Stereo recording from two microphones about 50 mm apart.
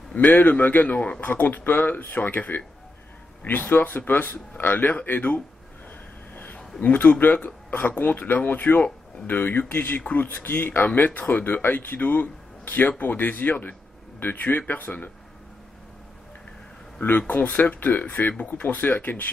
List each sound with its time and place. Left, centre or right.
0.2 s speech: left
6.3 s a sound: left
7.4 s speech: left
17.3 s speech: left